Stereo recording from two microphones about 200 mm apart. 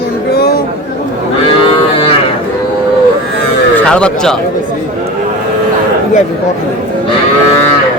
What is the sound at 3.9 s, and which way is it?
Speech, 5° left (ahead or behind).